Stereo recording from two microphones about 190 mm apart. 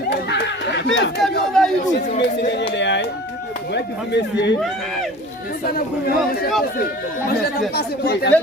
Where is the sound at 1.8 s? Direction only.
40° left (ahead or behind).